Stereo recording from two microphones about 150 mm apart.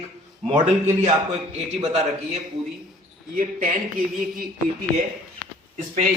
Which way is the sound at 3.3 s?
65° right (ahead or behind).